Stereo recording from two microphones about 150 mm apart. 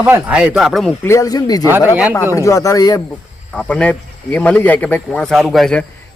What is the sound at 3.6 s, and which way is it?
Speech, 5° left (ahead or behind).